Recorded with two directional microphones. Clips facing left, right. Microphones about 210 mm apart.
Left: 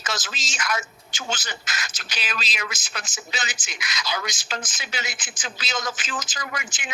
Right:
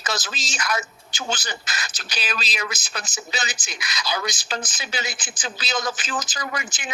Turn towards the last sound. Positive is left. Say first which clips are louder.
# right 3 dB
turn(degrees=-35)  # may be behind; listen again after turning